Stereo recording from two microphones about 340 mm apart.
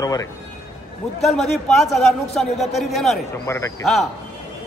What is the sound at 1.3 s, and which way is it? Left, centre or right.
A man's voice, centre.